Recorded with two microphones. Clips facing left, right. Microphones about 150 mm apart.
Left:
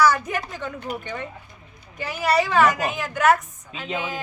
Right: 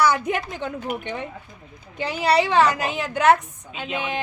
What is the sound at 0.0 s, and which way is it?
A woman's voice, 20° right (ahead or behind).